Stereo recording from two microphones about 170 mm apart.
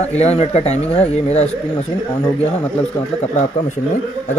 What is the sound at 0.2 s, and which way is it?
Speech, 40° left (ahead or behind).